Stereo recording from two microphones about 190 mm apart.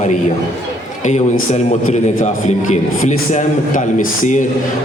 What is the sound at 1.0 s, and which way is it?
A man's voice, 35° left (ahead or behind).